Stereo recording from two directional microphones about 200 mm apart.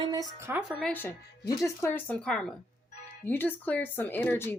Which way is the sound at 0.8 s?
5° left (ahead or behind).